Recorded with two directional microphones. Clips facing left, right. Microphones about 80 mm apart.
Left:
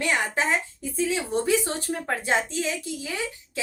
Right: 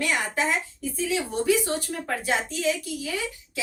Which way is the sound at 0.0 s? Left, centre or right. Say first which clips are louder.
Left 1 dB; left.